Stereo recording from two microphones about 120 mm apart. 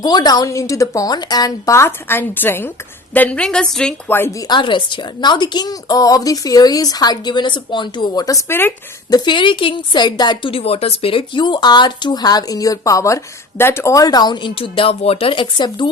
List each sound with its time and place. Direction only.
0.0 s a woman's voice: 35° left (ahead or behind); by 3.9 s 5° left (ahead or behind)
4.1 s a woman's voice: 20° left (ahead or behind)
4.4 s a woman's voice: 40° left (ahead or behind); by 8.7 s 20° left (ahead or behind)
9.0 s a woman's voice: 35° left (ahead or behind)